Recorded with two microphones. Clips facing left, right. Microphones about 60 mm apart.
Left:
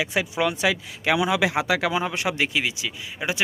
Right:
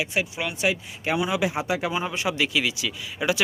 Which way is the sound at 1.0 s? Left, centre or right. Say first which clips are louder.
Left 3 dB; left.